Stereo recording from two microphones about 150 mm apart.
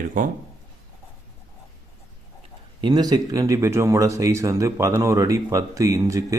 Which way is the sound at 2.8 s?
30° right (ahead or behind).